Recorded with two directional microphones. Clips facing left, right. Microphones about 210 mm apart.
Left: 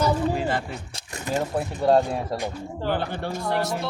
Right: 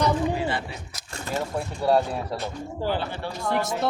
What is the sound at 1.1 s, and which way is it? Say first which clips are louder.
Speech: left 3 dB; 15° left (ahead or behind).